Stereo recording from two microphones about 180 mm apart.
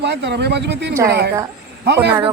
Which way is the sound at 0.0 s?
70° right (ahead or behind).